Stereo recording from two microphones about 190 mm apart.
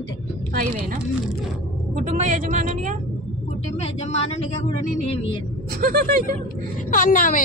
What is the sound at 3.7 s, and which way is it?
Speech, 35° left (ahead or behind).